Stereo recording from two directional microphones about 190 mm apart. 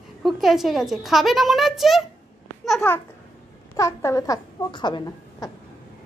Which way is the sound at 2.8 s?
10° left (ahead or behind).